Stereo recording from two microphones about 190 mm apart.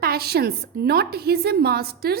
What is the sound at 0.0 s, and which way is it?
A woman's voice, 55° right (ahead or behind).